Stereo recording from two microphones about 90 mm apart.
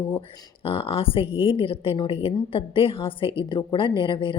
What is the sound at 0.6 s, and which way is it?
A woman's voice, 90° left.